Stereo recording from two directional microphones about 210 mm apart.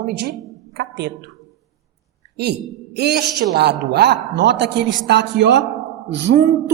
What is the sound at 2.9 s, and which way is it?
A man's voice, 50° right (ahead or behind).